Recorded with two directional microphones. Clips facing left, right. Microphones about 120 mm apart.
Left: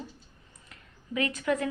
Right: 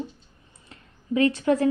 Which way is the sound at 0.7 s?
30° right (ahead or behind).